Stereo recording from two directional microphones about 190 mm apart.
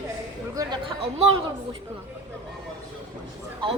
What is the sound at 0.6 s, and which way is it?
Speech, 20° right (ahead or behind).